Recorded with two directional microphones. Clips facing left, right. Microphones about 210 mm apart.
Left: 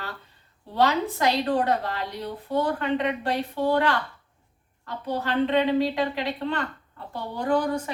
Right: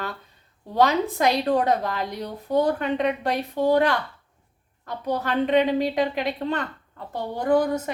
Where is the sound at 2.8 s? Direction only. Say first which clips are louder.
Right 2 dB; 15° right (ahead or behind).